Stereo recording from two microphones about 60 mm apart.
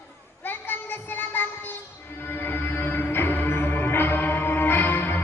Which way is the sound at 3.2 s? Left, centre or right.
Left.